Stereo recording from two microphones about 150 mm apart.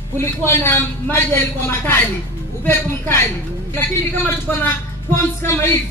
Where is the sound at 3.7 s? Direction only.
15° left (ahead or behind).